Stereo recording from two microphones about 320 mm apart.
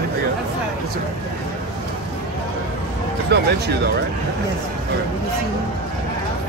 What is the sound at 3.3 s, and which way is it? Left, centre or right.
Speech, right.